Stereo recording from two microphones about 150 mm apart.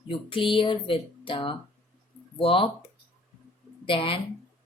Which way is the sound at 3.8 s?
35° left (ahead or behind).